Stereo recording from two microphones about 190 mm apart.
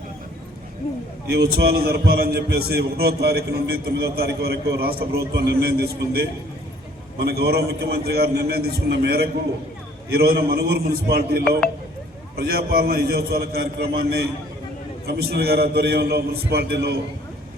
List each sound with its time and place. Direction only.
1.3 s a man's voice: 55° right (ahead or behind)